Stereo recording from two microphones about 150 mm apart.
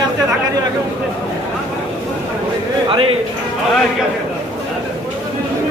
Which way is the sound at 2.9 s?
35° right (ahead or behind).